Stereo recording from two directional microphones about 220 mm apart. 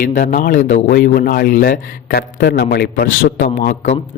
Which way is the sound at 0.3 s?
35° left (ahead or behind).